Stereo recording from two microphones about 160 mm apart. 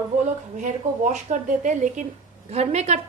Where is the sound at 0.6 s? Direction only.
50° right (ahead or behind).